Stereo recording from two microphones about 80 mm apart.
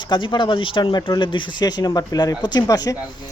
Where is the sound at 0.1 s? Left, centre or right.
Left.